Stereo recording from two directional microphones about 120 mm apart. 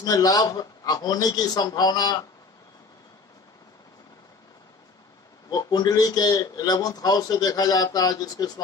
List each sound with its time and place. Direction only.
0.0 s a man's voice: 30° left (ahead or behind)
5.5 s a man's voice: 35° left (ahead or behind)